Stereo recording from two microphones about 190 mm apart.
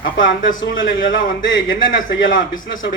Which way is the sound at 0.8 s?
45° left (ahead or behind).